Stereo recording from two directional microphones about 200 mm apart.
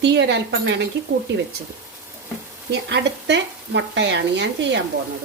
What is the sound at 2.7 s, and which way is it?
Speech, 60° right (ahead or behind).